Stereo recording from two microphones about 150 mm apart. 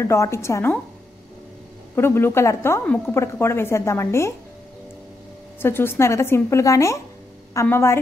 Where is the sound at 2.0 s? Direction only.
15° left (ahead or behind).